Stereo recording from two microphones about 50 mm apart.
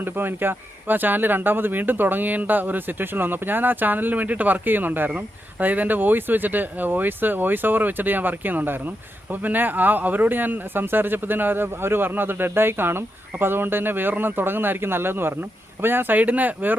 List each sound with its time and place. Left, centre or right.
0.0 s speech: right